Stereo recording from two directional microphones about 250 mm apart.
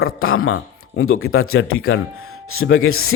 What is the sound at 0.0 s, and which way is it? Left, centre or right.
Speech, left.